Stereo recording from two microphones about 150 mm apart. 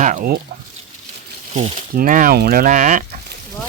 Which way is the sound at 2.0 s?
65° right (ahead or behind).